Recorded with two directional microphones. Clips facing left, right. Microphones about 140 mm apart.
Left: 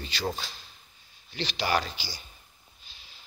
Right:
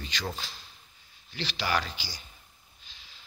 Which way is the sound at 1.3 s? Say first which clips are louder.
Left 2 dB; 15° left (ahead or behind).